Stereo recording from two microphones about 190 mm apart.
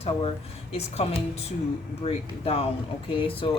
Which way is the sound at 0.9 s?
35° left (ahead or behind).